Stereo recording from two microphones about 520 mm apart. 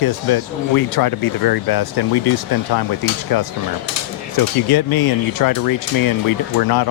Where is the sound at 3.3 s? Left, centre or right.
Left.